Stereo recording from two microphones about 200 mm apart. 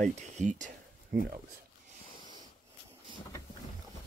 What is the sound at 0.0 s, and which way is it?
Speech, 40° right (ahead or behind).